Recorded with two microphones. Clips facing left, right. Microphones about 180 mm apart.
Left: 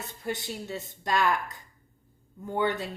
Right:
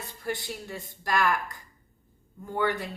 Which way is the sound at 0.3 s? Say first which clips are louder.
Even; 20° left (ahead or behind).